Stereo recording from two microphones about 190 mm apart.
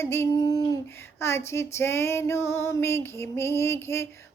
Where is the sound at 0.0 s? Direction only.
15° left (ahead or behind).